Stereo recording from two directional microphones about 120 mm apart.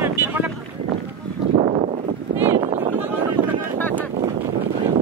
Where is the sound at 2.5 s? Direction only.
60° right (ahead or behind).